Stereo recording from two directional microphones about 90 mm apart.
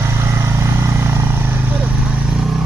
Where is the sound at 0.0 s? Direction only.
30° right (ahead or behind).